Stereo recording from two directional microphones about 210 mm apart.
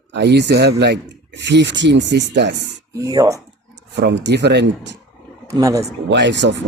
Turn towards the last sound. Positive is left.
turn(degrees=-55)  # may be behind; listen again after turning